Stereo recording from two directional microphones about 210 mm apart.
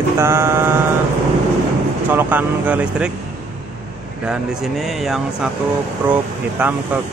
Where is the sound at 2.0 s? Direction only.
10° right (ahead or behind).